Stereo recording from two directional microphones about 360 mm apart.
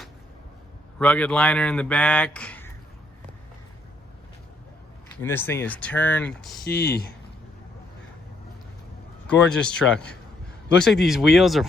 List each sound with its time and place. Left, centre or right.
0.9 s speech: centre
5.2 s speech: centre
6.7 s speech: left
9.2 s speech: centre